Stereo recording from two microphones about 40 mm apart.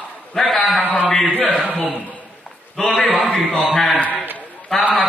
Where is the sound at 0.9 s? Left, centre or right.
Centre.